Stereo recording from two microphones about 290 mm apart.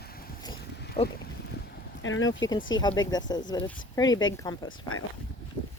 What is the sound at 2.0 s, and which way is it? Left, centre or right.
Speech, left.